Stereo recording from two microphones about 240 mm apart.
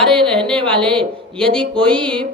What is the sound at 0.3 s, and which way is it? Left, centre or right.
A woman's voice, centre.